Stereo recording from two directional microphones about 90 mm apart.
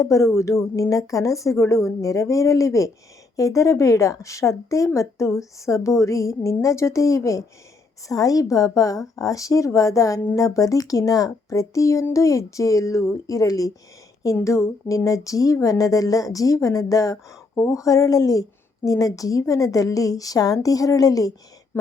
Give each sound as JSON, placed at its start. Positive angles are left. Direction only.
{"t": 0.0, "sound": "a woman's voice", "side_deg": 35}